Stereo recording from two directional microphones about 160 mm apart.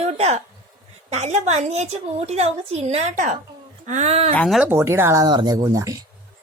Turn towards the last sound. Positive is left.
turn(degrees=-20)  # may be behind; listen again after turning